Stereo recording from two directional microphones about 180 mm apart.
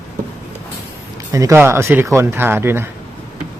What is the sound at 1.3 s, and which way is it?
Speech, 15° right (ahead or behind).